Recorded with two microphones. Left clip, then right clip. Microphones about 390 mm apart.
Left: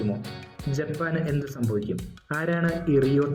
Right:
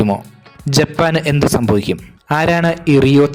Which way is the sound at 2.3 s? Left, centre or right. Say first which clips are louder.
Right 13 dB; right.